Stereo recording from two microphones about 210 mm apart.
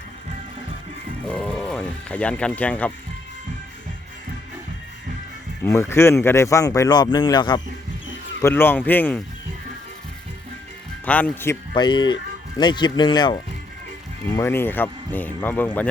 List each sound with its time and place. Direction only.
1.3 s speech: 5° left (ahead or behind)
5.6 s speech: 10° left (ahead or behind)
11.0 s speech: 5° left (ahead or behind)
11.7 s speech: 20° left (ahead or behind)